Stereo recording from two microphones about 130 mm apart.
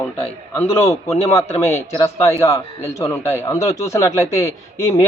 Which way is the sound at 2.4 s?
20° left (ahead or behind).